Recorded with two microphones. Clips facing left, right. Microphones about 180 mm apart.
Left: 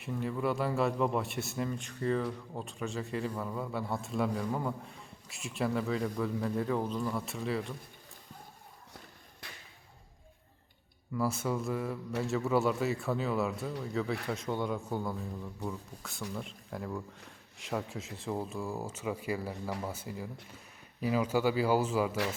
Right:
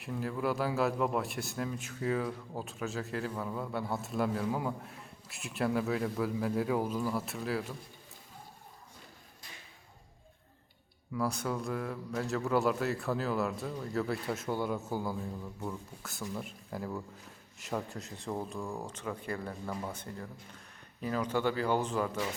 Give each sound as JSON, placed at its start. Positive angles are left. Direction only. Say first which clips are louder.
{"t": 0.0, "sound": "a man's voice", "louder": "left 1 dB", "side_deg": 0}
{"t": 9.4, "sound": "a sound", "louder": "left 4 dB", "side_deg": 65}
{"t": 11.1, "sound": "a man's voice", "louder": "left 1 dB", "side_deg": 0}